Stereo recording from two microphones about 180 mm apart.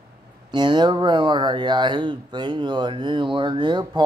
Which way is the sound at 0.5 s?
25° right (ahead or behind).